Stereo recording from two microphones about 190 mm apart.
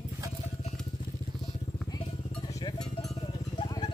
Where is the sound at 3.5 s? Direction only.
20° left (ahead or behind).